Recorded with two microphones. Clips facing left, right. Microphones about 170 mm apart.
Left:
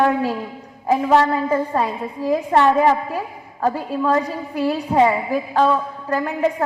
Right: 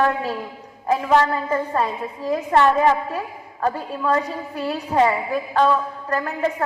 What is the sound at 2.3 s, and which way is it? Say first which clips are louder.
Speech: left 1 dB; 30° left (ahead or behind).